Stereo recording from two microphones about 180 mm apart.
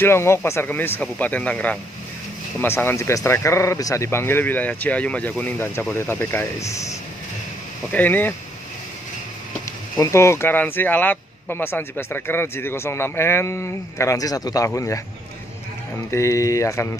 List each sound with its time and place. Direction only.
0.0 s speech: 15° left (ahead or behind)
9.9 s speech: 15° left (ahead or behind)
16.1 s speech: 15° left (ahead or behind)